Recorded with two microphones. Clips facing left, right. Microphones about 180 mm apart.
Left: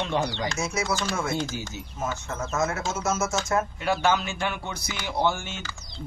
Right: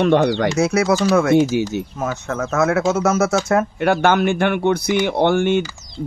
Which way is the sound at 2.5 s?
65° right (ahead or behind).